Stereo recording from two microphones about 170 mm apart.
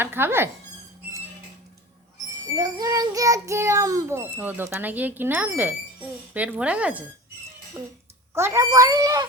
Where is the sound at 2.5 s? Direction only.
20° right (ahead or behind).